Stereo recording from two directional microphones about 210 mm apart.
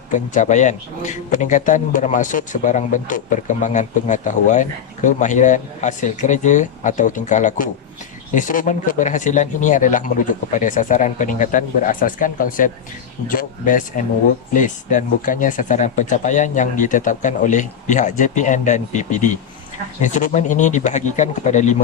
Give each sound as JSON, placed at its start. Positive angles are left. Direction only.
{"t": 0.1, "sound": "speech", "side_deg": 35}